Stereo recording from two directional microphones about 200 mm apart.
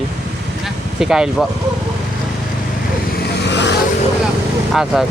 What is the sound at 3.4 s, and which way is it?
Vehicle, 60° left (ahead or behind).